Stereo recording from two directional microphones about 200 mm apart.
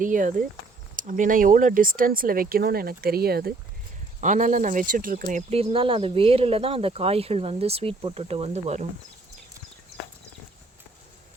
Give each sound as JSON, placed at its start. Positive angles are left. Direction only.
{"t": 0.0, "sound": "speech", "side_deg": -40}
{"t": 4.2, "sound": "speech", "side_deg": -40}